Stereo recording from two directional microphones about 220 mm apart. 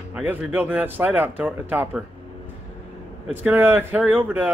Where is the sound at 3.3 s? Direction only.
10° right (ahead or behind).